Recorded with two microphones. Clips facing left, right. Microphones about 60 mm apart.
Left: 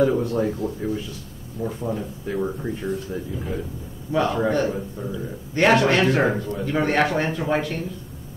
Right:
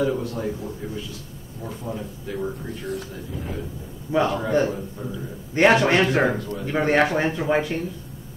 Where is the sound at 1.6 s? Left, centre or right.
Left.